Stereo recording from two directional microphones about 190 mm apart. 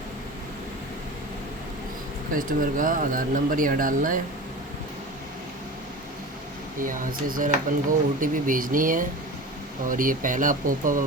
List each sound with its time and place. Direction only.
2.3 s speech: 45° right (ahead or behind)
6.7 s speech: 45° right (ahead or behind)